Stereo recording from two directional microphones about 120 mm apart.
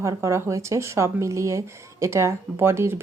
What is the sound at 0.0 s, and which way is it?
Speech, 25° right (ahead or behind).